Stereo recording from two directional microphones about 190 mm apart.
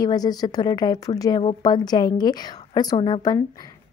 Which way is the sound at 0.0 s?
20° left (ahead or behind).